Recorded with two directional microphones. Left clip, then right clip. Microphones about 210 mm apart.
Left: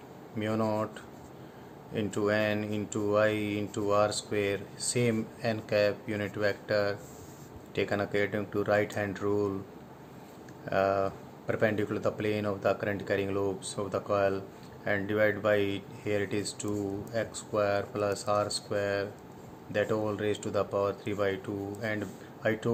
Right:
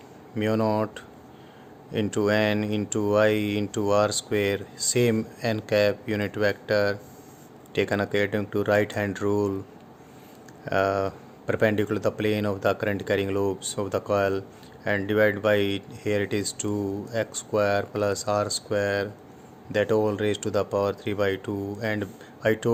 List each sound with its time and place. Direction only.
0.3 s speech: 45° right (ahead or behind)
10.7 s speech: 50° right (ahead or behind)